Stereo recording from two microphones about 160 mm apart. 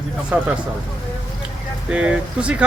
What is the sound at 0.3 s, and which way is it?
Speech, 10° right (ahead or behind).